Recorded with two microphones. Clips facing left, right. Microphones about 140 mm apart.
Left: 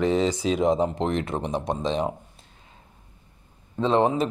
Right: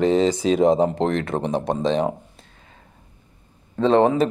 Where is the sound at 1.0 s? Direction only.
40° right (ahead or behind).